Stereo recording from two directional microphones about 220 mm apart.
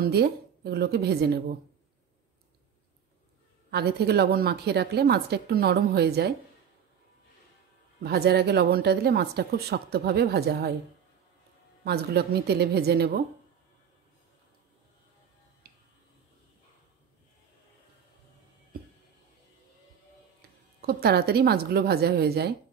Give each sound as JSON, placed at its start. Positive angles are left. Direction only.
{"t": 0.0, "sound": "a woman's voice", "side_deg": -45}
{"t": 3.7, "sound": "a woman's voice", "side_deg": -45}
{"t": 8.0, "sound": "a woman's voice", "side_deg": -50}
{"t": 11.8, "sound": "a woman's voice", "side_deg": -45}
{"t": 15.7, "sound": "finger snapping", "side_deg": -45}
{"t": 18.7, "sound": "a sound", "side_deg": -40}
{"t": 20.8, "sound": "a woman's voice", "side_deg": -45}